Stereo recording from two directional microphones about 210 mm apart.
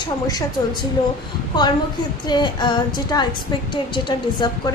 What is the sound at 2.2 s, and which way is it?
A woman's voice, 20° left (ahead or behind).